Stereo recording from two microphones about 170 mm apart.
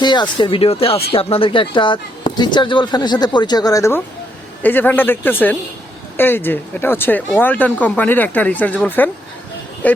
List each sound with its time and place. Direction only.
0.0 s speech: 25° left (ahead or behind); by 10.0 s 10° left (ahead or behind)